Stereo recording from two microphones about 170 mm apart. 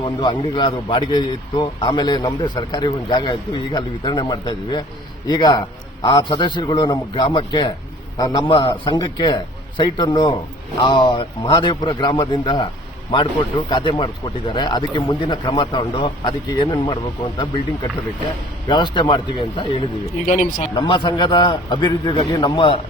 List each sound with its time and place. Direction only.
0.0 s a man's voice: 25° left (ahead or behind)
18.7 s a man's voice: 30° left (ahead or behind)
20.3 s speech: 50° left (ahead or behind)
20.7 s a man's voice: 25° left (ahead or behind)